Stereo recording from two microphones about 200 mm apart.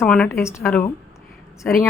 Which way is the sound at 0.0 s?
10° left (ahead or behind).